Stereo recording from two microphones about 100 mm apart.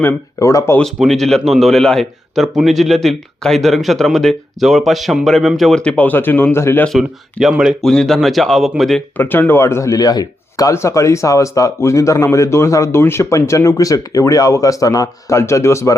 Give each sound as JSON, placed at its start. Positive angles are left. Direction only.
{"t": 0.3, "sound": "a man's voice", "side_deg": 30}
{"t": 0.9, "sound": "a man's voice", "side_deg": 0}
{"t": 6.8, "sound": "a man's voice", "side_deg": 0}
{"t": 7.8, "sound": "a man's voice", "side_deg": 5}
{"t": 9.1, "sound": "a man's voice", "side_deg": 20}